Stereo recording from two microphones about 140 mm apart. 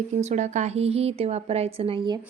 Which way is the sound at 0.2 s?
55° right (ahead or behind).